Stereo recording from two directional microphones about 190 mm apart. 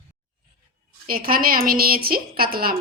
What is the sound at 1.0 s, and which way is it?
A woman's voice, 50° right (ahead or behind).